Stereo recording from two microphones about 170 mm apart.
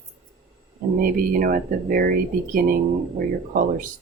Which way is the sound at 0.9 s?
60° right (ahead or behind).